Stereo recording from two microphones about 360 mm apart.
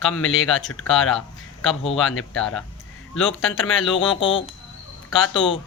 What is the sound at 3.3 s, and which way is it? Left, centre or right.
Speech, left.